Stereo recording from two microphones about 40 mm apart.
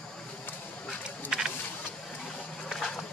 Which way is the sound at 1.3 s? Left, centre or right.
Centre.